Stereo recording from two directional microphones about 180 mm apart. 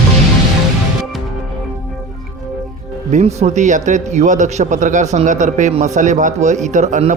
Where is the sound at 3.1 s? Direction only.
40° right (ahead or behind).